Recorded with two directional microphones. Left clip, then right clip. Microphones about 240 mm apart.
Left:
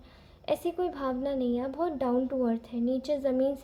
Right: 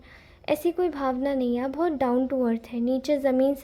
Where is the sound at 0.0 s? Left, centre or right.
Right.